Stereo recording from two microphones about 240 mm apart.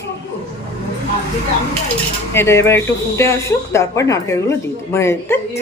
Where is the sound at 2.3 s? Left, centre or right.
Centre.